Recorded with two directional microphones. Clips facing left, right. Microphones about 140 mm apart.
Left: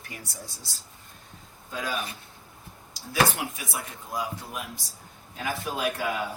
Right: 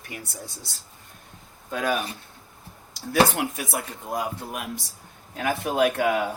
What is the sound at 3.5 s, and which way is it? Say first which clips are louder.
Speech: right 6 dB; 50° right (ahead or behind).